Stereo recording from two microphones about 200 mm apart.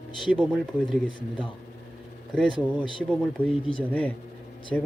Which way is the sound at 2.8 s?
5° left (ahead or behind).